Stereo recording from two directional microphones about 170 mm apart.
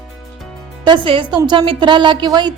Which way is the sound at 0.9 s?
30° right (ahead or behind).